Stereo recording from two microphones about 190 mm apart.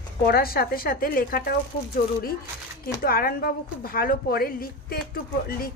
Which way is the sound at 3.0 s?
50° left (ahead or behind).